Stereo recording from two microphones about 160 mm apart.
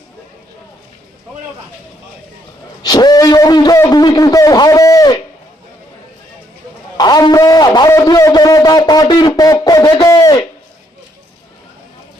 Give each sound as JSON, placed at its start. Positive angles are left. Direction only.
{"t": 2.8, "sound": "speech", "side_deg": 25}
{"t": 6.9, "sound": "a man's voice", "side_deg": 25}